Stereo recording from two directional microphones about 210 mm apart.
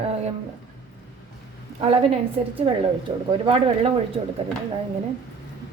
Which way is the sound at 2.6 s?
25° right (ahead or behind).